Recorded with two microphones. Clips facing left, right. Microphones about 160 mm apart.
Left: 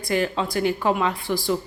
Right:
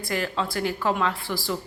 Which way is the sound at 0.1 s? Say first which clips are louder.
Left 4 dB; 20° left (ahead or behind).